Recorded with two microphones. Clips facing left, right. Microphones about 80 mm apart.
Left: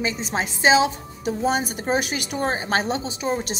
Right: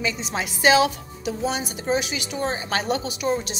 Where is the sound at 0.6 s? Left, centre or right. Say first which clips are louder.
Even; left.